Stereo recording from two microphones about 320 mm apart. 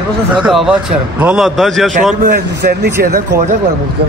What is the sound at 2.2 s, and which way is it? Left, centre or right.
Speech, right.